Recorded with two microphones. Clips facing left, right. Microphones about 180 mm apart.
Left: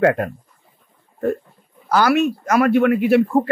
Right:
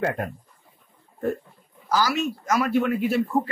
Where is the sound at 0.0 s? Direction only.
90° left.